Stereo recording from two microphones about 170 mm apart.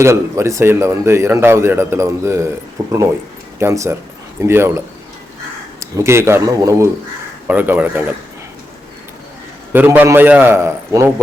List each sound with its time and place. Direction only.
0.0 s speech: 15° right (ahead or behind)
5.8 s speech: 15° right (ahead or behind)
9.7 s speech: 10° right (ahead or behind)